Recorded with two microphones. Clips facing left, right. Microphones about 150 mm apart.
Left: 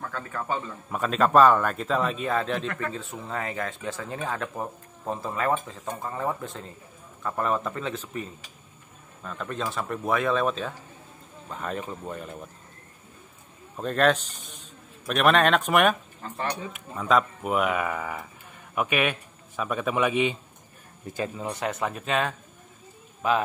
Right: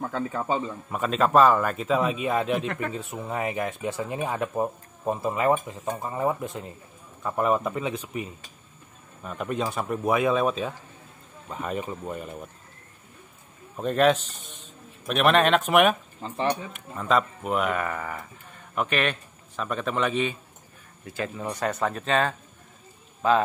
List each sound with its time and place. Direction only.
0.0 s speech: 20° right (ahead or behind)
0.8 s a man's voice: centre (ahead or behind)
13.7 s a man's voice: 5° right (ahead or behind)
14.3 s speech: 40° left (ahead or behind)
15.0 s a man's voice: centre (ahead or behind)
16.2 s speech: 20° right (ahead or behind)
16.7 s a man's voice: centre (ahead or behind)
21.5 s a man's voice: centre (ahead or behind)